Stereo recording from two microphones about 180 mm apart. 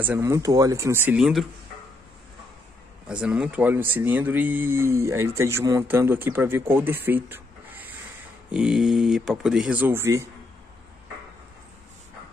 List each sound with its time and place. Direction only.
0.0 s speech: 15° right (ahead or behind)
3.1 s speech: 5° right (ahead or behind)